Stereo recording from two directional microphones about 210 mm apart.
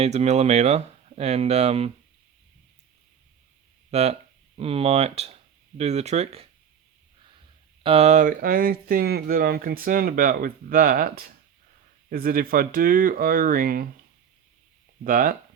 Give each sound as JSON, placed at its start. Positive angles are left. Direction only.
{"t": 0.0, "sound": "speech", "side_deg": -30}
{"t": 3.9, "sound": "speech", "side_deg": -30}
{"t": 7.9, "sound": "speech", "side_deg": -30}
{"t": 15.0, "sound": "speech", "side_deg": -40}